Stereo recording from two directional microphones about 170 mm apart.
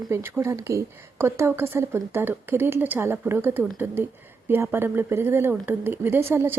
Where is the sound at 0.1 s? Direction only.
15° right (ahead or behind).